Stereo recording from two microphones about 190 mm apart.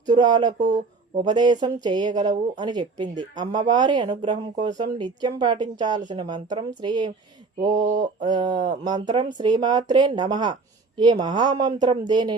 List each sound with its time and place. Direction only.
0.0 s speech: 25° right (ahead or behind)
7.7 s mantra: 40° right (ahead or behind)
7.9 s speech: 25° right (ahead or behind)